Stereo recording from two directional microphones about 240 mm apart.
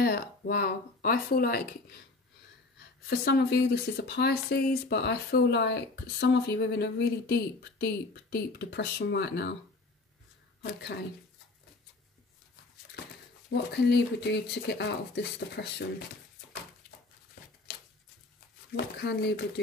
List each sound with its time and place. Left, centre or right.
0.0 s speech: left
3.1 s speech: left
10.6 s a woman's voice: left
13.5 s speech: left
18.8 s speech: left